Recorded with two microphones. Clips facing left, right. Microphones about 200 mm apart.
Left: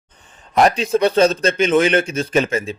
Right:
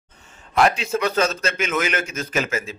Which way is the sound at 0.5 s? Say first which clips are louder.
Left 4 dB; 35° left (ahead or behind).